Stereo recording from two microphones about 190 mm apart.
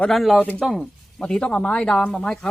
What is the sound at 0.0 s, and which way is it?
Speech, centre (ahead or behind).